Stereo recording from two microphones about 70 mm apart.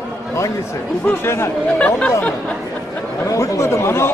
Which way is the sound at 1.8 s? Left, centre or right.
Left.